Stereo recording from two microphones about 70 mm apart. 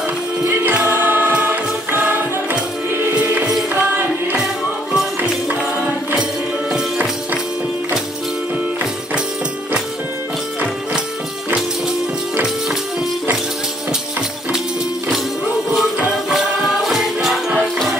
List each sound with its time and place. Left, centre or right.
0.5 s choir: right
1.3 s music: right
2.9 s music: right
3.2 s music: right
3.9 s music: right
4.9 s music: centre
16.3 s music: centre